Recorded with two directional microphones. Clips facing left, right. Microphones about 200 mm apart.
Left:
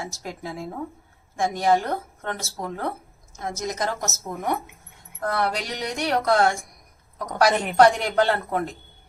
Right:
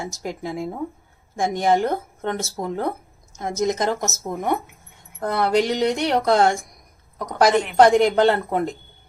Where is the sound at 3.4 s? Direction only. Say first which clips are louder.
Right 6 dB; 20° right (ahead or behind).